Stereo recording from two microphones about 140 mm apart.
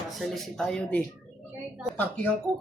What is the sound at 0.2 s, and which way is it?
Speech, 5° left (ahead or behind).